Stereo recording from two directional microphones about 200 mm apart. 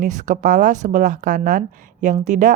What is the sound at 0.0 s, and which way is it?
Speech, 40° right (ahead or behind).